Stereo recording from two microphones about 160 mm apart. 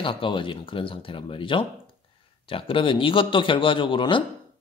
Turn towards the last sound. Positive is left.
turn(degrees=30)  # may be behind; listen again after turning